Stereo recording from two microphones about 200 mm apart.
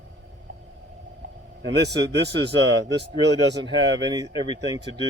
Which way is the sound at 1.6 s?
60° right (ahead or behind).